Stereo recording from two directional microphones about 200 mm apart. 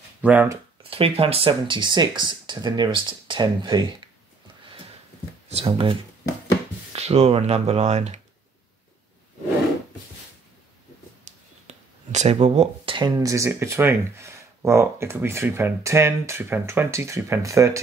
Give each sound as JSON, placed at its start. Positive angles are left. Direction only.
{"t": 0.2, "sound": "speech", "side_deg": -10}
{"t": 0.8, "sound": "speech", "side_deg": -30}
{"t": 5.5, "sound": "speech", "side_deg": -30}
{"t": 11.2, "sound": "speech", "side_deg": -35}